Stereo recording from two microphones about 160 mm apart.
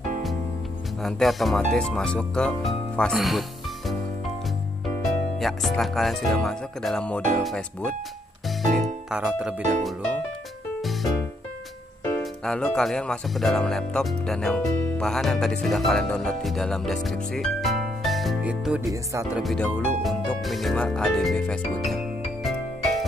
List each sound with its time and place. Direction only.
1.0 s speech: centre (ahead or behind)
5.0 s speech: centre (ahead or behind)
9.1 s speech: 5° right (ahead or behind)
10.8 s music: centre (ahead or behind)
12.4 s speech: 5° left (ahead or behind)